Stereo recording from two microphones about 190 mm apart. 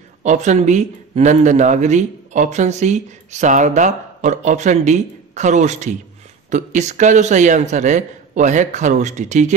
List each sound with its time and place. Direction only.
0.2 s speech: 40° right (ahead or behind)